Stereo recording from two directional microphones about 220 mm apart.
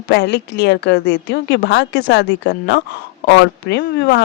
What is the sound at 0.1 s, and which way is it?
Speech, 50° left (ahead or behind).